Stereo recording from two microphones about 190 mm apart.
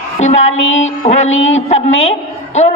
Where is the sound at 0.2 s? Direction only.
35° left (ahead or behind).